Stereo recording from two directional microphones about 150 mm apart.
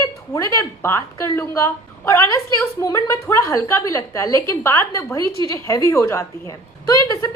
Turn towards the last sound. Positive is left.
turn(degrees=25)  # may be behind; listen again after turning